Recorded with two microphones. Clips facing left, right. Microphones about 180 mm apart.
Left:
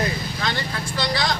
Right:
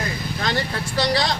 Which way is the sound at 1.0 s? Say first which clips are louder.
Right 3 dB; 35° right (ahead or behind).